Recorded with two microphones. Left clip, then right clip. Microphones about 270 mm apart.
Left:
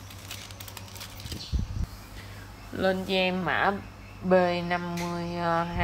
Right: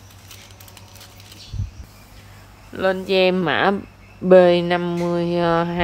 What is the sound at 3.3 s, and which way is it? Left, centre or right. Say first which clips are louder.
A woman's voice: right 7 dB; right.